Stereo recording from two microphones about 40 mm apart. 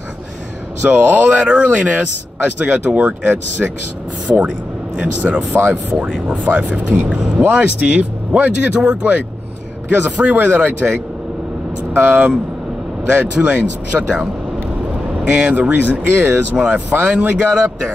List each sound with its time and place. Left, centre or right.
0.8 s speech: right
5.5 s speech: right
6.2 s speech: right
9.8 s a man's voice: right
12.0 s speech: right
15.7 s speech: right
16.5 s speech: right